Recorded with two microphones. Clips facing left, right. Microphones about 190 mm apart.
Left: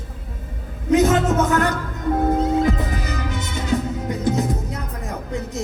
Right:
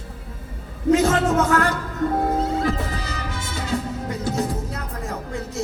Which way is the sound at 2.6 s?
20° left (ahead or behind).